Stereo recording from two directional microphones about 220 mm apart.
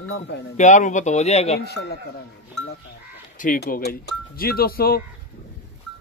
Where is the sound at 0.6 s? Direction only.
35° left (ahead or behind).